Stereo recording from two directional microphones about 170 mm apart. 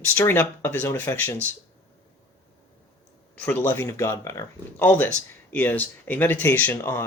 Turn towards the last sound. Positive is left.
turn(degrees=15)  # may be behind; listen again after turning